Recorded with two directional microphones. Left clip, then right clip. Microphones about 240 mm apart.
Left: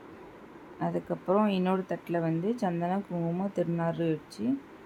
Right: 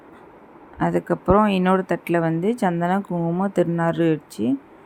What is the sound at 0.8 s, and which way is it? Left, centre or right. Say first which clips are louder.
Speech: right 11 dB; right.